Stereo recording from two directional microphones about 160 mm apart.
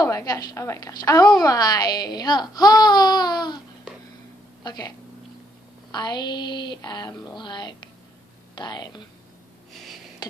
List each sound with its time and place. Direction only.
0.0 s speech: 20° left (ahead or behind)
4.6 s speech: 25° left (ahead or behind)